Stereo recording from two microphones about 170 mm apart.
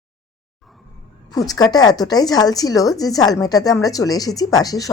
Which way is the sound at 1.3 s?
20° left (ahead or behind).